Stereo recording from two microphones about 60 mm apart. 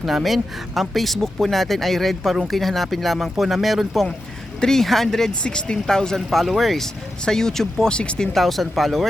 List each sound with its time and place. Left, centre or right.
0.0 s speech: centre
7.9 s speech: centre
8.3 s speech: centre